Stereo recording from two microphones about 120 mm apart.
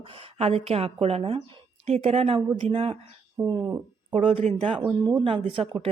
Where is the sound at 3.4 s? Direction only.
35° right (ahead or behind).